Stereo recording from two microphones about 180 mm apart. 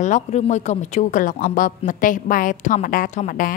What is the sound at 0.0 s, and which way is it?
A woman's voice, 40° left (ahead or behind).